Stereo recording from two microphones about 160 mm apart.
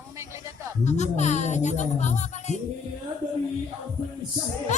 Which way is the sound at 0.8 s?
45° left (ahead or behind).